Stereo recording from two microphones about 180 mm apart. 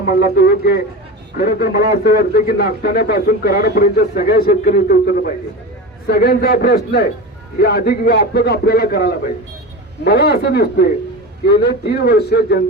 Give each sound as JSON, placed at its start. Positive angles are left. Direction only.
{"t": 0.0, "sound": "a man's voice", "side_deg": 60}